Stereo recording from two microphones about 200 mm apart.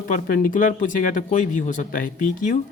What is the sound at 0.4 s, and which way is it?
Speech, 40° left (ahead or behind).